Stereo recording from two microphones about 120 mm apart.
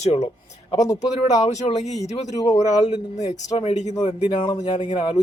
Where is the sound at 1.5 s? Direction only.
65° left (ahead or behind).